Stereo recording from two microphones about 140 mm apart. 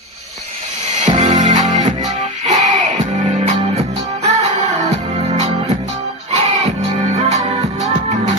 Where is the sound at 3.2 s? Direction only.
35° right (ahead or behind).